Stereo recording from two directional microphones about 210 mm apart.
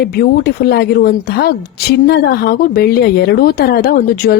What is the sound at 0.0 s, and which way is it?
Speech, 50° left (ahead or behind).